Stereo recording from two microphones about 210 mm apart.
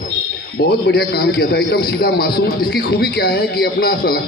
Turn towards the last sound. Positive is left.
turn(degrees=50)  # may be behind; listen again after turning